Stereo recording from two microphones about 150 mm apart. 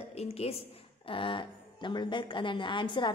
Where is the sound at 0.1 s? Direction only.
45° left (ahead or behind).